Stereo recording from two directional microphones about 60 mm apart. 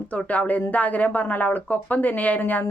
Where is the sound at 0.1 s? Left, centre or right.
Left.